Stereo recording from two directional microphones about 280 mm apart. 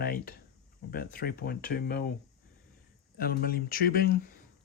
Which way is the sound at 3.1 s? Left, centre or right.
Left.